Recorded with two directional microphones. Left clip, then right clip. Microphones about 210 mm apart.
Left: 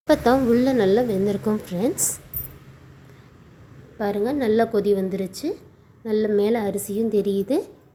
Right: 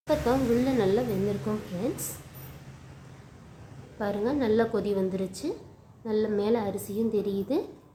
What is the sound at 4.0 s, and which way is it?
A woman's voice, 20° left (ahead or behind).